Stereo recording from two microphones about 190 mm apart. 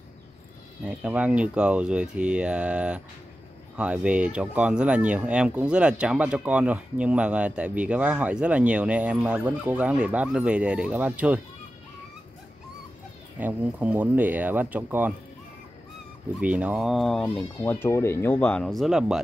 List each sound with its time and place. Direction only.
0.8 s speech: 5° right (ahead or behind)
13.4 s speech: 10° right (ahead or behind)
16.3 s speech: 5° right (ahead or behind)
17.6 s speech: 15° left (ahead or behind); by 19.2 s 5° right (ahead or behind)